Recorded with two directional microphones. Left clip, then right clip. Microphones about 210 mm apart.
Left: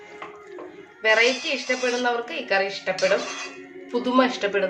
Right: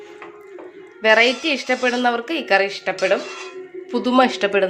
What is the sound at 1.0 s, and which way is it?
A woman's voice, 45° right (ahead or behind).